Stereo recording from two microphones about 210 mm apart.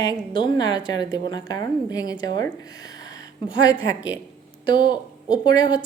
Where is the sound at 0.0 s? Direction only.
20° left (ahead or behind).